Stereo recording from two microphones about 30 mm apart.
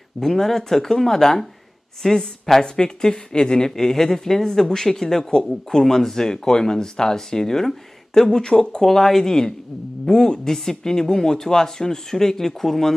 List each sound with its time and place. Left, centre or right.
0.2 s a woman's voice: centre
2.6 s a woman's voice: left
8.8 s a woman's voice: centre